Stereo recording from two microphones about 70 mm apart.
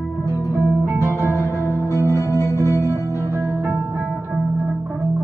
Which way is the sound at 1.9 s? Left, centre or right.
Left.